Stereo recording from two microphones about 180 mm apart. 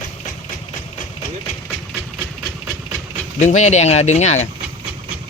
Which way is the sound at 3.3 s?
40° left (ahead or behind).